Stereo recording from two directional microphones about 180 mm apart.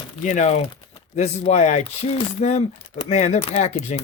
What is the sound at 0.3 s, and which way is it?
Speech, 40° left (ahead or behind).